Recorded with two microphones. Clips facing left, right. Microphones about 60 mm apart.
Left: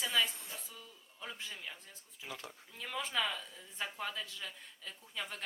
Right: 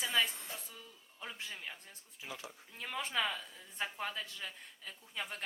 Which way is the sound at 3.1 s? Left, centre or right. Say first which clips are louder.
Right 1 dB; centre.